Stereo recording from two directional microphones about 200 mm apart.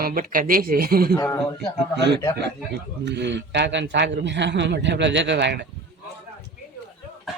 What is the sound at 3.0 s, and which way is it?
A man's voice, 60° right (ahead or behind).